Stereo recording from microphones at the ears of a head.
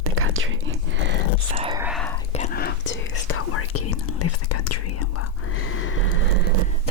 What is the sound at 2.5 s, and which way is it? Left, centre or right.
Whispering, left.